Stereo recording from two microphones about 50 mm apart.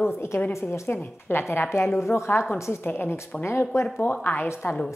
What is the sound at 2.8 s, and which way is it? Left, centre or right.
Speech, left.